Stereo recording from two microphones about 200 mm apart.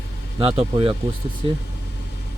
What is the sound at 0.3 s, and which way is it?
Speech, 30° right (ahead or behind).